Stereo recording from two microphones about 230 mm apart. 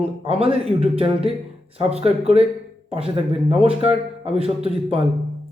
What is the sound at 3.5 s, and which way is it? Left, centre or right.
Speech, right.